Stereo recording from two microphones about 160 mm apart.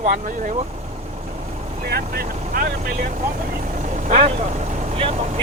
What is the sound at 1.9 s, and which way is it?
Speech, 80° right.